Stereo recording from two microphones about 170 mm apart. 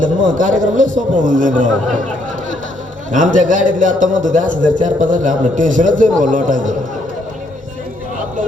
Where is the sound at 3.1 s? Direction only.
50° right (ahead or behind).